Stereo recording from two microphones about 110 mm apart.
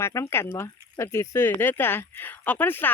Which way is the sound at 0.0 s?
25° left (ahead or behind).